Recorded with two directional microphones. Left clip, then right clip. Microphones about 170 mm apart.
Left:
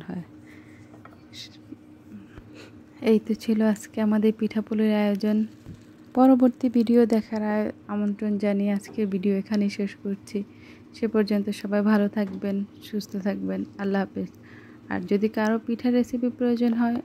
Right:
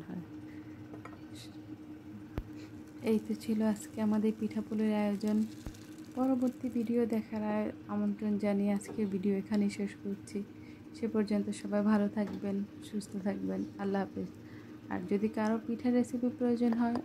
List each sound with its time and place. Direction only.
3.0 s speech: 40° left (ahead or behind)
6.1 s a woman's voice: 55° left (ahead or behind); by 16.9 s 25° left (ahead or behind)